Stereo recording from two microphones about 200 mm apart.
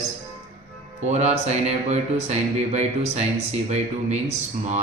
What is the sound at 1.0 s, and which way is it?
Speech, 35° right (ahead or behind).